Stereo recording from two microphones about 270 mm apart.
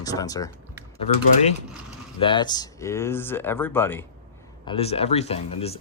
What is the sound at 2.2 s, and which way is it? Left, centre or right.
Speech, centre.